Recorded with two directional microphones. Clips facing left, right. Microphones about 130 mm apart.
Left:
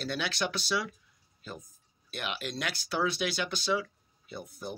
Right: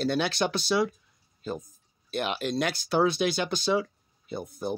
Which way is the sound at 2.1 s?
35° right (ahead or behind).